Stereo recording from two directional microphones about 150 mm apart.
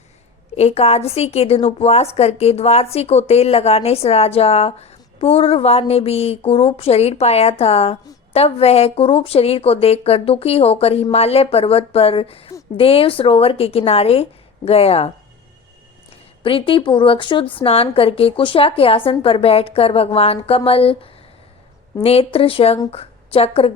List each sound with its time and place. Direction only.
0.5 s a woman's voice: 45° left (ahead or behind)
16.4 s a woman's voice: 35° left (ahead or behind)